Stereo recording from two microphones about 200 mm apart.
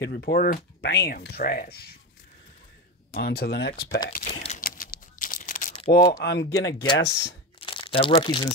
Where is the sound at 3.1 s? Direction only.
50° left (ahead or behind).